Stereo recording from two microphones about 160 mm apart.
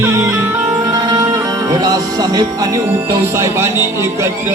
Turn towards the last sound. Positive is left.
turn(degrees=-15)  # may be behind; listen again after turning